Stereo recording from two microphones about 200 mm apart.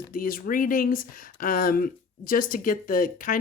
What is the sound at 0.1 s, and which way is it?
Speech, 45° left (ahead or behind).